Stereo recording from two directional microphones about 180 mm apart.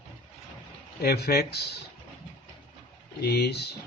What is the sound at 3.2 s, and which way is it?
Speech, 65° left (ahead or behind).